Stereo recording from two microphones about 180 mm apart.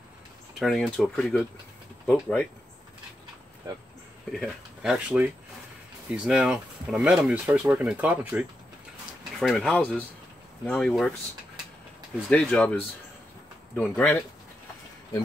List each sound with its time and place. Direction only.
0.6 s speech: centre (ahead or behind)
4.3 s speech: centre (ahead or behind)
9.4 s speech: centre (ahead or behind)
12.3 s speech: 5° left (ahead or behind)
13.7 s speech: 10° left (ahead or behind)